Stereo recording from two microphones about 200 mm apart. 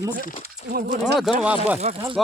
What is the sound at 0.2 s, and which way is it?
Speech, 45° left (ahead or behind).